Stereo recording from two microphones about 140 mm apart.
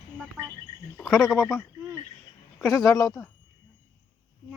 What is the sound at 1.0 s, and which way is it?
Speech, centre (ahead or behind).